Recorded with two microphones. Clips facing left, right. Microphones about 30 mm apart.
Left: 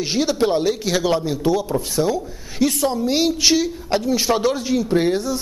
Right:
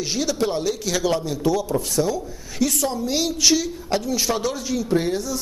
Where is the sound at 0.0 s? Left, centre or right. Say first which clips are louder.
Left 4 dB; left.